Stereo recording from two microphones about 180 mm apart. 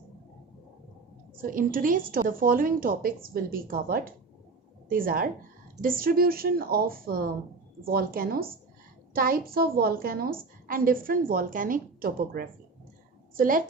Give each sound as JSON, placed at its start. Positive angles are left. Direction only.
{"t": 1.4, "sound": "a woman's voice", "side_deg": -50}